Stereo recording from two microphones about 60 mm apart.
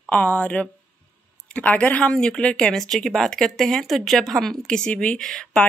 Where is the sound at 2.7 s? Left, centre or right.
Centre.